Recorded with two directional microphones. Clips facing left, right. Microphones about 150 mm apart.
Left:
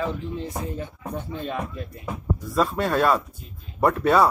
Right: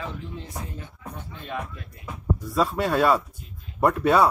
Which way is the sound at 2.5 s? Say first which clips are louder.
Left 1 dB; 5° right (ahead or behind).